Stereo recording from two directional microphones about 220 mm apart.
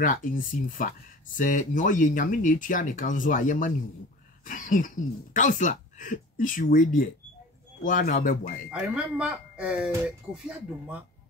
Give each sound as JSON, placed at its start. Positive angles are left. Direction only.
{"t": 0.0, "sound": "speech", "side_deg": 40}
{"t": 8.6, "sound": "speech", "side_deg": 0}